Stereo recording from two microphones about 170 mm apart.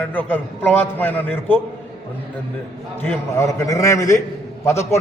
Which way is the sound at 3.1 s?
15° left (ahead or behind).